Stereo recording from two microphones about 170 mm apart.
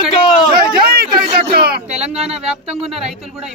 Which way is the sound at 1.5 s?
65° right (ahead or behind).